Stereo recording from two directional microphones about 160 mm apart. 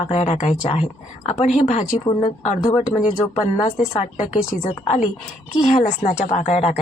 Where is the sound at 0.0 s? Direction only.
45° left (ahead or behind).